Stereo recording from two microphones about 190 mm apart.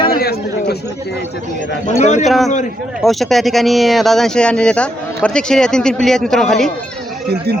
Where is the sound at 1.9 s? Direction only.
40° left (ahead or behind).